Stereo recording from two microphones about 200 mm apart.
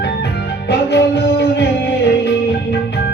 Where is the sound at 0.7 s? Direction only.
60° left (ahead or behind).